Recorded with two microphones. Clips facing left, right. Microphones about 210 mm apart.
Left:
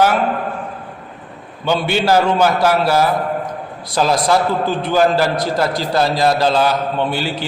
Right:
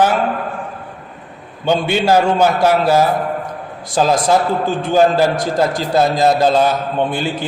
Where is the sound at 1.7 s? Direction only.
20° right (ahead or behind).